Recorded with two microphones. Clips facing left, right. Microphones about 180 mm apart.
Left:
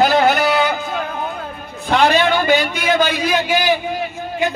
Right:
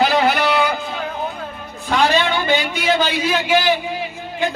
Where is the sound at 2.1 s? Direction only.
50° left (ahead or behind).